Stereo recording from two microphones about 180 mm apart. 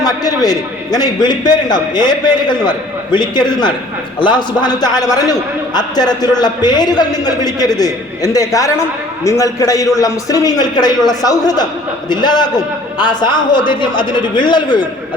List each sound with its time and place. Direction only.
0.4 s a man's voice: 20° left (ahead or behind)